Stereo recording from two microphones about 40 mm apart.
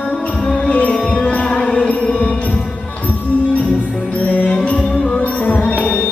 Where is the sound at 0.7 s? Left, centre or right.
Left.